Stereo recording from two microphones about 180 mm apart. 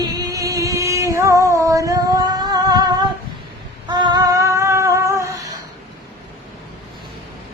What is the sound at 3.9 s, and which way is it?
Humming, 25° right (ahead or behind).